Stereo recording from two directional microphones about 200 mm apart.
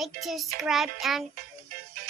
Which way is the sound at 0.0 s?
Centre (ahead or behind).